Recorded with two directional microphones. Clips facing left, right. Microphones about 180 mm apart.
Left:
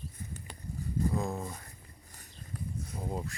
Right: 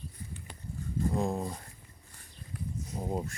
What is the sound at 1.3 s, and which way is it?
Speech, 15° right (ahead or behind).